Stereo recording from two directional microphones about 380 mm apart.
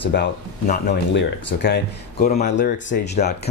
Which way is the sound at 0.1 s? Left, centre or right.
Left.